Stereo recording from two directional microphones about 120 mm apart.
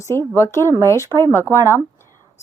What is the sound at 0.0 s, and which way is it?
A woman's voice, 25° left (ahead or behind).